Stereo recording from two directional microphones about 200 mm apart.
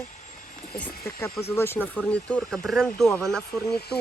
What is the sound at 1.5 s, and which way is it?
Speech, 10° left (ahead or behind).